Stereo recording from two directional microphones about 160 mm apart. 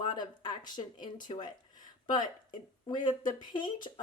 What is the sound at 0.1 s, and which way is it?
Speech, 30° left (ahead or behind).